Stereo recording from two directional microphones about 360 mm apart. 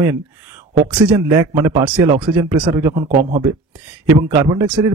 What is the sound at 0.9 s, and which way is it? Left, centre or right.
Speech, centre.